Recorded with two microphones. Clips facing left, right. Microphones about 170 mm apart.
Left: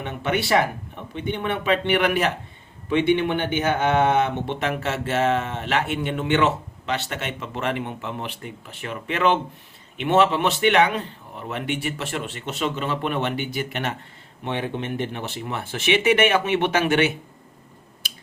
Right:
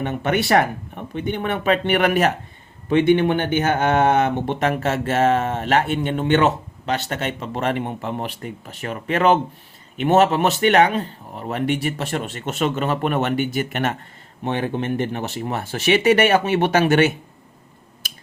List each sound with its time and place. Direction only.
0.0 s speech: 45° right (ahead or behind)